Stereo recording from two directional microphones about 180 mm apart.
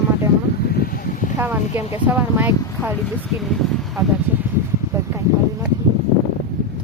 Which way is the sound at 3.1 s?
Centre (ahead or behind).